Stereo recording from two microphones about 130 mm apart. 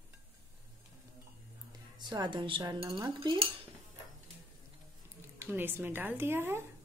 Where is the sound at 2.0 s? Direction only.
35° right (ahead or behind).